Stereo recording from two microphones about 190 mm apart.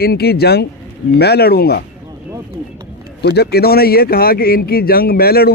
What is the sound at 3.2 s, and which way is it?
Speech, 60° left (ahead or behind).